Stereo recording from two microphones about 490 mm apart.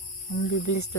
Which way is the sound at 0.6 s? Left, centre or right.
Left.